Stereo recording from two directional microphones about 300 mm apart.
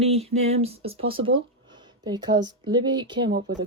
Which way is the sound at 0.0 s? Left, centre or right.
Right.